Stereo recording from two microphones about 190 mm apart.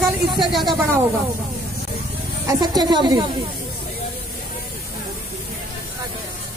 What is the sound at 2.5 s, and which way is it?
Speech, 20° right (ahead or behind).